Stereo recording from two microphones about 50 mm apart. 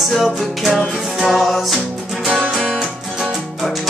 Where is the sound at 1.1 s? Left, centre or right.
Centre.